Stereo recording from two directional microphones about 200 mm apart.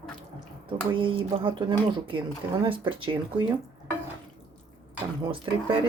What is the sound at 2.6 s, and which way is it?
Speech, 25° right (ahead or behind).